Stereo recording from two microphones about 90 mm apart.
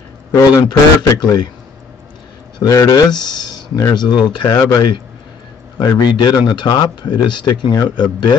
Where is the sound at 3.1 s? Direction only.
50° left (ahead or behind).